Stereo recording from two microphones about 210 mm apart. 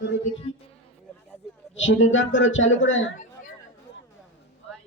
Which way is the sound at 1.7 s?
65° left (ahead or behind).